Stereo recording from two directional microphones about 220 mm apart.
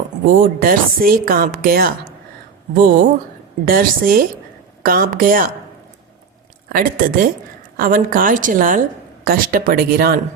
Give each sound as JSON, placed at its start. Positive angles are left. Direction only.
{"t": 0.3, "sound": "a woman's voice", "side_deg": -40}
{"t": 6.7, "sound": "a woman's voice", "side_deg": -40}